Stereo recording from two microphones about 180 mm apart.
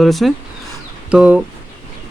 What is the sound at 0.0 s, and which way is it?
Speech, centre (ahead or behind).